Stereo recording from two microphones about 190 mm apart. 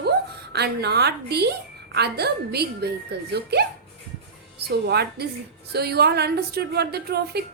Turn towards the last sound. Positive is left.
turn(degrees=-60)  # may be behind; listen again after turning